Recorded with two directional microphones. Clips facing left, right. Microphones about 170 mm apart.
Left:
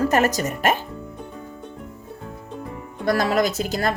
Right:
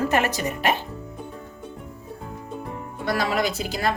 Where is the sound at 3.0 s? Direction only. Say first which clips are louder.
Left 4 dB; 45° left (ahead or behind).